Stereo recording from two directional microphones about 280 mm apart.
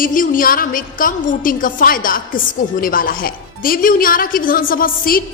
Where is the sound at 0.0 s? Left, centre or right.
Left.